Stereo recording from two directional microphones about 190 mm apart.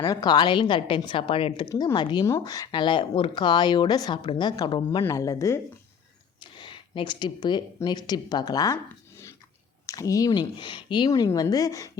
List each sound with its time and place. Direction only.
0.0 s speech: 20° left (ahead or behind)